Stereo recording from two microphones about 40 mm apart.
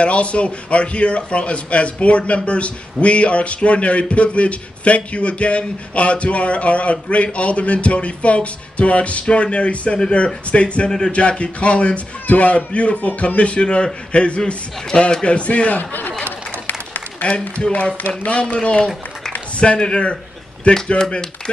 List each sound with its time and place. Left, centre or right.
0.0 s a man's voice: left
15.8 s speech: left
16.6 s applause: left
18.0 s a man's voice: left
21.0 s speech: centre